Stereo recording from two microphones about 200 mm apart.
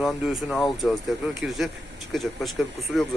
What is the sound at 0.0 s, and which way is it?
Speech, centre (ahead or behind).